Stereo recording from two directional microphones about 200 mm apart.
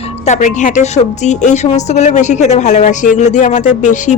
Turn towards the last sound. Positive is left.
turn(degrees=40)  # may be behind; listen again after turning